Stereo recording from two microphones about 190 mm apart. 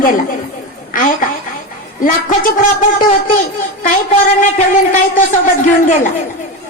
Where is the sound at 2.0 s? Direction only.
45° left (ahead or behind).